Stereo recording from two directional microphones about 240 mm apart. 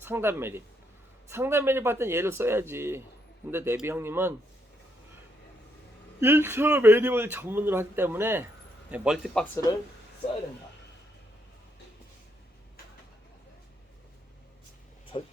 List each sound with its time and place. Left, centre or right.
0.0 s speech: centre
6.1 s a man's voice: centre
15.1 s speech: centre